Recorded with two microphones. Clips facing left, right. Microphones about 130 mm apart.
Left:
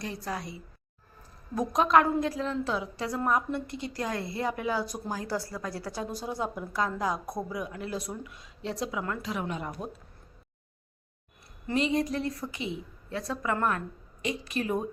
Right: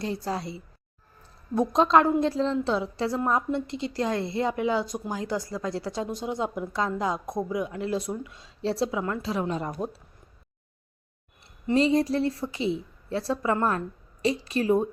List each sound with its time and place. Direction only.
0.0 s a woman's voice: 30° right (ahead or behind)
11.6 s a woman's voice: 30° right (ahead or behind)